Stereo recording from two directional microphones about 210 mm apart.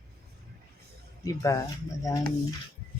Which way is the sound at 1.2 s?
15° left (ahead or behind).